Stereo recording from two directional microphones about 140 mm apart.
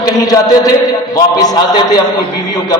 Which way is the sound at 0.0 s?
25° left (ahead or behind).